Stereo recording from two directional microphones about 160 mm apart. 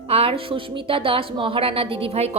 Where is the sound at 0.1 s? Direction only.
35° right (ahead or behind).